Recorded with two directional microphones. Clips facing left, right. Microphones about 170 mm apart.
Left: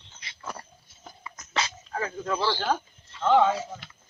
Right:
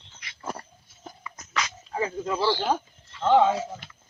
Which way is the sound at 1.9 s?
15° right (ahead or behind).